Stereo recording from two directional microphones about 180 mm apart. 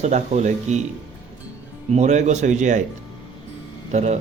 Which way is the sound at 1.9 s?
40° right (ahead or behind).